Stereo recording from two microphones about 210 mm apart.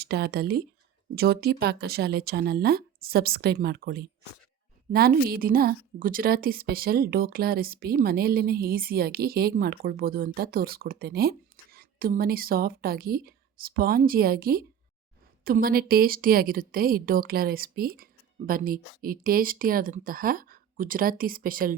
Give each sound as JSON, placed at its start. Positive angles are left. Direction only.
{"t": 0.0, "sound": "a woman's voice", "side_deg": -50}